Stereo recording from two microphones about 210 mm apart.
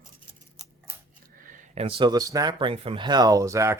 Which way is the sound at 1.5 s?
35° right (ahead or behind).